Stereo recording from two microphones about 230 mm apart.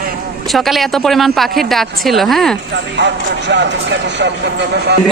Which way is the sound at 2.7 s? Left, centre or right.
Right.